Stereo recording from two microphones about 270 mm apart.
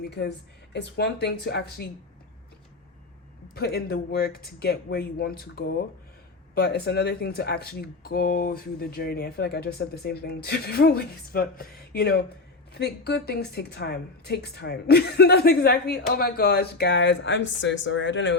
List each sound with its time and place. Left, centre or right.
0.0 s speech: left
3.5 s speech: left